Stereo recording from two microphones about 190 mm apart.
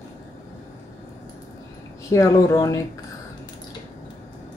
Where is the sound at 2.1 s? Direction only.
15° left (ahead or behind).